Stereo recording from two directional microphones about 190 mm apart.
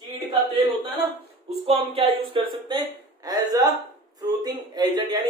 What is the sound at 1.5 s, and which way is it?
A man's voice, 30° right (ahead or behind).